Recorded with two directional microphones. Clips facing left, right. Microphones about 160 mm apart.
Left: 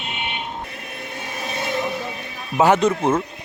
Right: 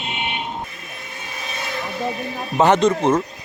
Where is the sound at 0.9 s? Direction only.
60° left (ahead or behind).